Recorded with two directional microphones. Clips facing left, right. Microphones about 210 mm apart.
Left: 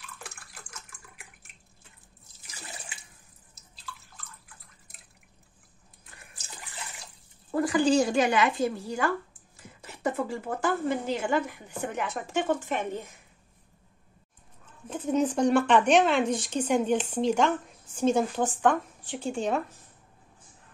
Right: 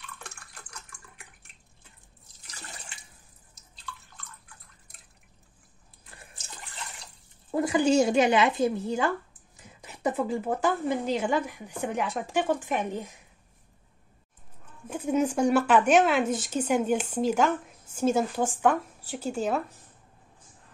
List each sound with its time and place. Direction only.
0.2 s water: centre (ahead or behind)
7.5 s a woman's voice: 20° right (ahead or behind)
14.9 s speech: 10° right (ahead or behind)